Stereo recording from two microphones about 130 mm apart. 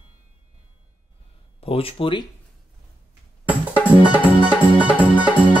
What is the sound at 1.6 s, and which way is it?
Speech, 45° left (ahead or behind).